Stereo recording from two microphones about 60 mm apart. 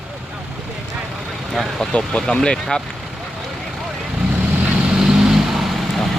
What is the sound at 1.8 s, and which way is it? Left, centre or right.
Speech, centre.